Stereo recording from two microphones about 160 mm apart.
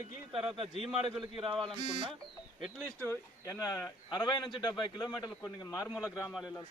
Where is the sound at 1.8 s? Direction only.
30° right (ahead or behind).